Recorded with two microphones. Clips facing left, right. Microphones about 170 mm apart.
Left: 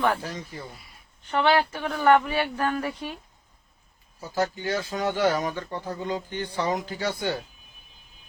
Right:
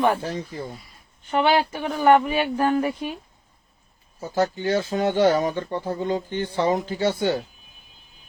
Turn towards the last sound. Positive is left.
turn(degrees=-25)  # may be behind; listen again after turning